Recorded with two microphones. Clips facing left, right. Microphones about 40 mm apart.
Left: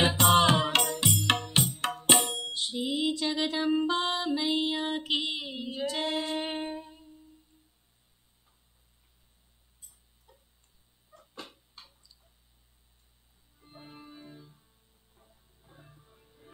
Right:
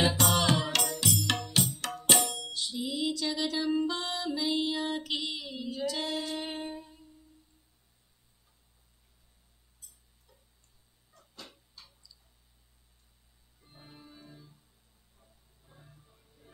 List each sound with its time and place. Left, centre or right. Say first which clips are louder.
0.0 s music: left 4 dB; left
11.1 s a sound: left 4 dB; left
13.7 s music: left 5 dB; left